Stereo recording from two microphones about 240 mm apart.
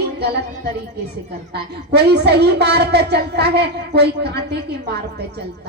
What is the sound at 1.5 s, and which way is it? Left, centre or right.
A woman's voice, right.